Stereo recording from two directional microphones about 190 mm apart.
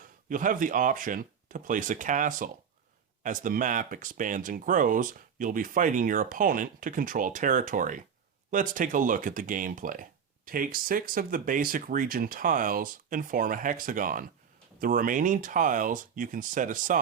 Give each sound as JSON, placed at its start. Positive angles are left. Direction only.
{"t": 0.3, "sound": "speech", "side_deg": -45}